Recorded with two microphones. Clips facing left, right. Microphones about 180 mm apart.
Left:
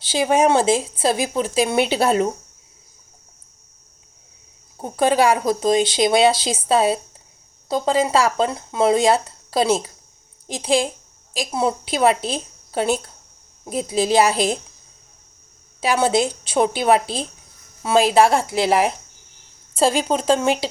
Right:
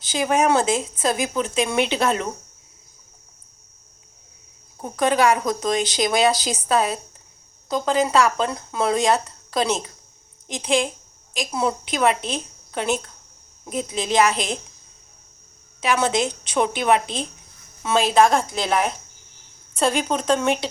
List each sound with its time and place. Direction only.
0.0 s speech: 30° left (ahead or behind)
4.8 s a woman's voice: 30° left (ahead or behind)
15.8 s speech: 35° left (ahead or behind)